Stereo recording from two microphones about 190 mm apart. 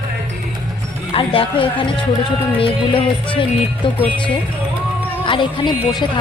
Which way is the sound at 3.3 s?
25° left (ahead or behind).